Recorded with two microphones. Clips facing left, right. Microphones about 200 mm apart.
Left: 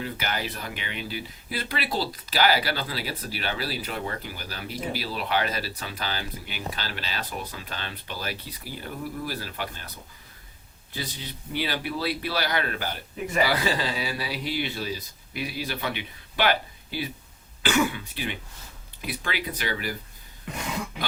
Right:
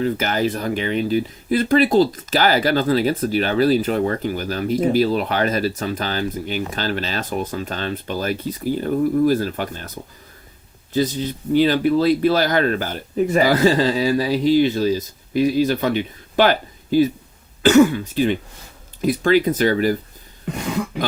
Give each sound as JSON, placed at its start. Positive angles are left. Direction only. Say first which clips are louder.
{"t": 0.0, "sound": "speech", "louder": "right 11 dB", "side_deg": -45}